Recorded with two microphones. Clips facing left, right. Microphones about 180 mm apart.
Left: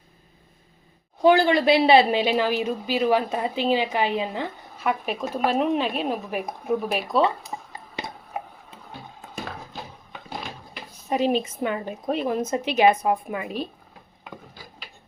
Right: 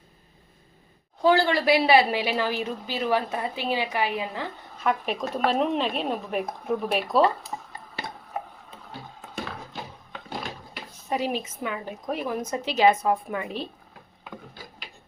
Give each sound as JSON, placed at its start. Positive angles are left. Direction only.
{"t": 1.2, "sound": "a woman's voice", "side_deg": 15}
{"t": 4.8, "sound": "speech", "side_deg": 5}
{"t": 7.4, "sound": "a sound", "side_deg": 15}
{"t": 11.1, "sound": "a woman's voice", "side_deg": 25}